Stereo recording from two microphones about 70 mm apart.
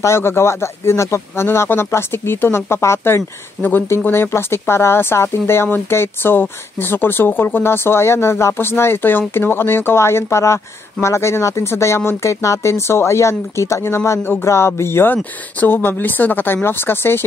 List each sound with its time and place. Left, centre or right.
0.0 s speech: left